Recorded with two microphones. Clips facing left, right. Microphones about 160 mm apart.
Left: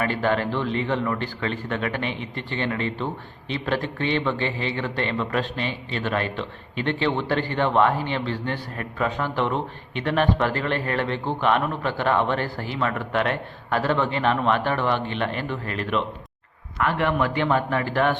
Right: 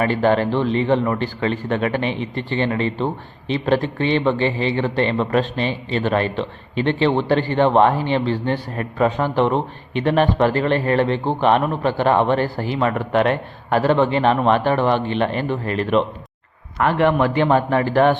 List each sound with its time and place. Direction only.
0.0 s speech: 25° right (ahead or behind)